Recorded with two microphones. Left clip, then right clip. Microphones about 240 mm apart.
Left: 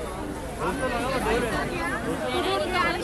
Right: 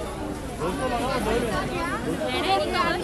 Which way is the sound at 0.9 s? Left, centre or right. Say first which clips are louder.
Right 1 dB; right.